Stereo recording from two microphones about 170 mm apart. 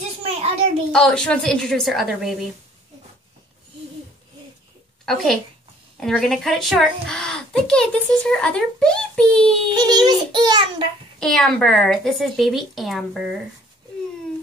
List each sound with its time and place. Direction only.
0.0 s a sound: 40° right (ahead or behind)
0.9 s a woman's voice: 5° left (ahead or behind)
5.0 s a woman's voice: centre (ahead or behind)
9.8 s a child's voice: 25° right (ahead or behind)
11.1 s a woman's voice: 5° left (ahead or behind)